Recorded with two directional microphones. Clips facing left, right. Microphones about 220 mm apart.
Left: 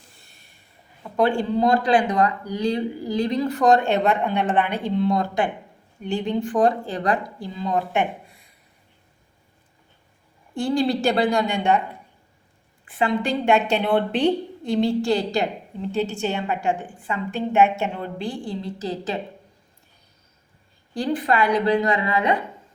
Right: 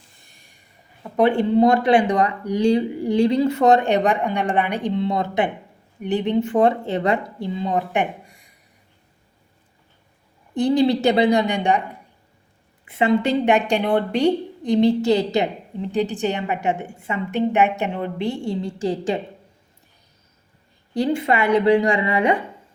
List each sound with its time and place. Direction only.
1.4 s a woman's voice: 25° right (ahead or behind)
10.5 s a woman's voice: 20° right (ahead or behind)
12.9 s a woman's voice: 25° right (ahead or behind)
20.9 s a woman's voice: 25° right (ahead or behind)